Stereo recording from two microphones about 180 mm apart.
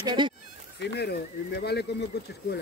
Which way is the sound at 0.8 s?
70° left (ahead or behind).